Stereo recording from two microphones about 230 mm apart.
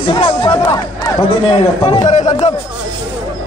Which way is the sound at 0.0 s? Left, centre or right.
Left.